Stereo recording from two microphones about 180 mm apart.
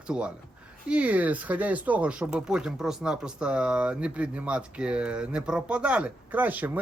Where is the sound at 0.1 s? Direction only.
5° right (ahead or behind).